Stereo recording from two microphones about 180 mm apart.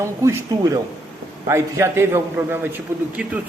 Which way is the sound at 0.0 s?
15° right (ahead or behind).